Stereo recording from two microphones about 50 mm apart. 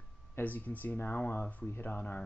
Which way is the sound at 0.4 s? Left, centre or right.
Left.